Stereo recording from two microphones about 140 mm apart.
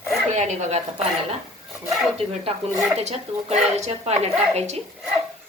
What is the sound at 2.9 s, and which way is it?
A woman's voice, 50° right (ahead or behind).